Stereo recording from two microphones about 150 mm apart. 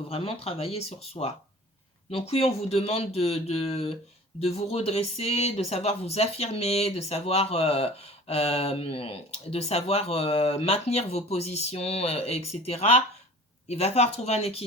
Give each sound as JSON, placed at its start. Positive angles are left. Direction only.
{"t": 0.1, "sound": "speech", "side_deg": 40}